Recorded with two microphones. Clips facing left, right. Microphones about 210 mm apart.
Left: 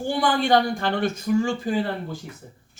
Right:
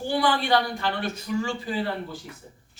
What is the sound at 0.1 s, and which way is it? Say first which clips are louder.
Speech: left 3 dB; 45° left (ahead or behind).